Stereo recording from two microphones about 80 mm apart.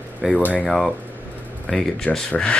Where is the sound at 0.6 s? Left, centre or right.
Centre.